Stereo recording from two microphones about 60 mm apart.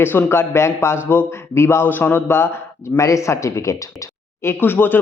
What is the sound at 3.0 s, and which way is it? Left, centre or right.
Speech, left.